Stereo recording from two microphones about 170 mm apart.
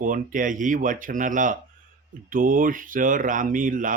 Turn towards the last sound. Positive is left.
turn(degrees=-50)  # may be behind; listen again after turning